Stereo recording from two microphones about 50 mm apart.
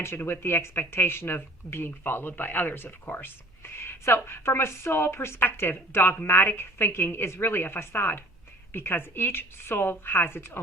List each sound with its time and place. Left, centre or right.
0.0 s a woman's voice: left